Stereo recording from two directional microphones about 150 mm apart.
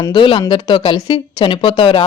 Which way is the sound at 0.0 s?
30° left (ahead or behind).